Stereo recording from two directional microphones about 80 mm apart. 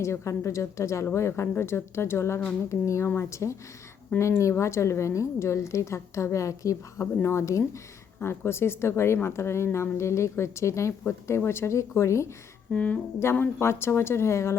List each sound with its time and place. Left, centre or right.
0.0 s a woman's voice: left
12.7 s speech: centre
13.2 s a woman's voice: left